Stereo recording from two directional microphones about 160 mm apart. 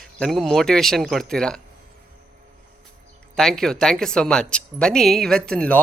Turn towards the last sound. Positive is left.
turn(degrees=5)  # may be behind; listen again after turning